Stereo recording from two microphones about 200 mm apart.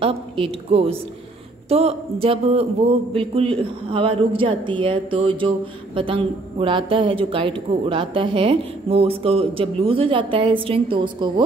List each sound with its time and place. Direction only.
0.0 s a woman's voice: 30° right (ahead or behind)